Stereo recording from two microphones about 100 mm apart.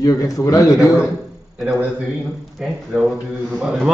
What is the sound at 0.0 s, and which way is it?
Speech, 35° left (ahead or behind).